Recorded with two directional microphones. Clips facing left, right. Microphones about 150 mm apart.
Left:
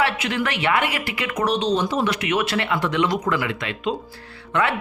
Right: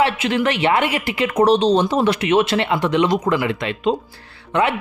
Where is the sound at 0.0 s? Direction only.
25° right (ahead or behind).